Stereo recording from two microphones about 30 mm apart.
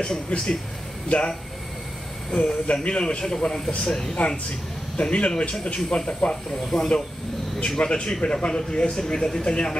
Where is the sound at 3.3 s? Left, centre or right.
Centre.